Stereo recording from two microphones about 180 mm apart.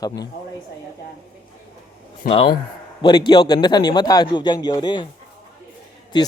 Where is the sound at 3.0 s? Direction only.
25° left (ahead or behind).